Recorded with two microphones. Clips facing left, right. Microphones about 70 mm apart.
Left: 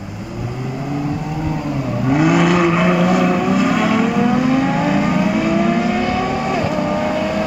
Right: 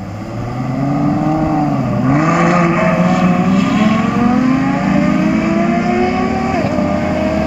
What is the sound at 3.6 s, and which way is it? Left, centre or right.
Vehicle, centre.